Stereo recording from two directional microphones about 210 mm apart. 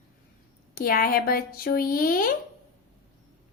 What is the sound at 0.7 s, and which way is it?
Speech, 45° left (ahead or behind).